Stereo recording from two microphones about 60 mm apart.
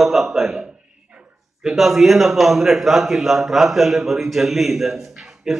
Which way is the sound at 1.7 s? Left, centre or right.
Centre.